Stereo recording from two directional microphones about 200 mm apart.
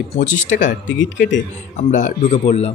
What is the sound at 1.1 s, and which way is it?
Speech, 65° left (ahead or behind).